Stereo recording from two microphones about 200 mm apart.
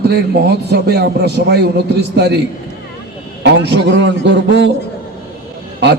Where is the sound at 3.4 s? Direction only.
60° right (ahead or behind).